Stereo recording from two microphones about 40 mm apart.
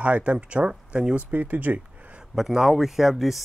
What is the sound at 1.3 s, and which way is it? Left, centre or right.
Speech, right.